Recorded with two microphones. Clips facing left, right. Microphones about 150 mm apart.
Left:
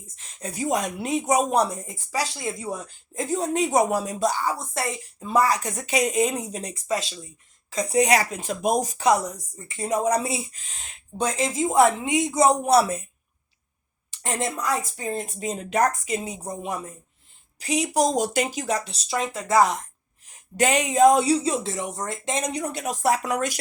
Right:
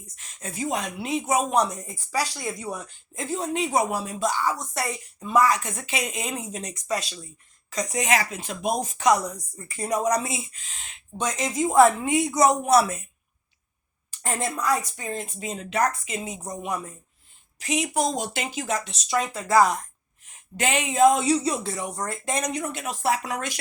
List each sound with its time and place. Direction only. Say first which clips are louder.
0.2 s a woman's voice: left 2 dB; 35° left (ahead or behind)
9.6 s speech: left 1 dB; 25° left (ahead or behind)
14.1 s a woman's voice: left 1 dB; 25° left (ahead or behind)
20.2 s a woman's voice: left 5 dB; 40° left (ahead or behind)